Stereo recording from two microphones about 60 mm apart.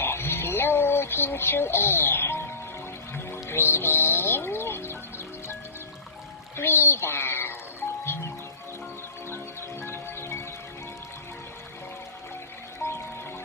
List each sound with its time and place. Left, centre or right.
0.0 s a sound: left
3.2 s music: left
6.6 s music: left
9.3 s music: left
12.8 s music: left